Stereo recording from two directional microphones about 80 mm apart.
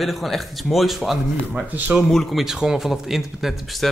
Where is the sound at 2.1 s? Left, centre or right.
Centre.